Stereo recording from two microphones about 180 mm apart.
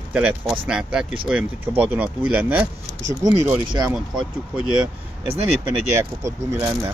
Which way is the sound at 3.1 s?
20° right (ahead or behind).